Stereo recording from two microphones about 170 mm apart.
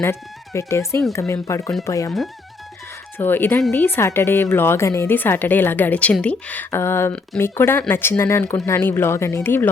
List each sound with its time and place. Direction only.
0.0 s a woman's voice: 15° left (ahead or behind)
3.2 s a woman's voice: 10° left (ahead or behind)